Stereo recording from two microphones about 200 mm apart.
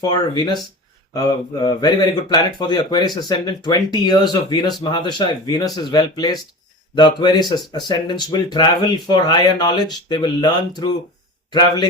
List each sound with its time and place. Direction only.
0.0 s speech: 20° left (ahead or behind)